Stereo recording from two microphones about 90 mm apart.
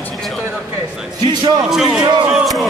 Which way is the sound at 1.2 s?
55° right (ahead or behind).